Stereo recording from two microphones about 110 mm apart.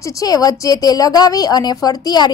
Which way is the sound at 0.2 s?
35° left (ahead or behind).